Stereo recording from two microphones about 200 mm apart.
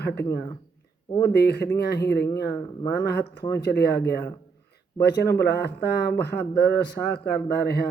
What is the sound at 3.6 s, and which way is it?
Speech, 55° left (ahead or behind).